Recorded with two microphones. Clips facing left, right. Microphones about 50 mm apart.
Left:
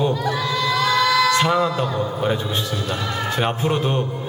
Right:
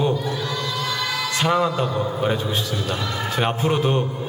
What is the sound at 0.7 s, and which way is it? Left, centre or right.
Music, left.